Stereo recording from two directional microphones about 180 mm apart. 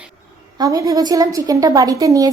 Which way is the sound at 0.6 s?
20° right (ahead or behind).